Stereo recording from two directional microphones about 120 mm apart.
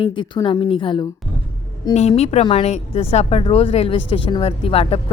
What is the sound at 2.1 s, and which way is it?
A woman's voice, 60° left (ahead or behind).